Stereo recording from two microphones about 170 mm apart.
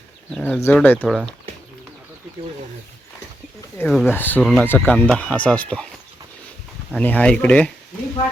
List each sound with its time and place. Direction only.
0.3 s speech: 5° left (ahead or behind)
3.8 s speech: 5° left (ahead or behind)
6.9 s speech: 10° left (ahead or behind)